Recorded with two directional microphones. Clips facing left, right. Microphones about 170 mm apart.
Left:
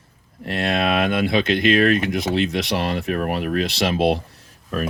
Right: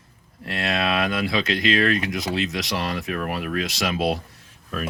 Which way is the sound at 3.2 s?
40° left (ahead or behind).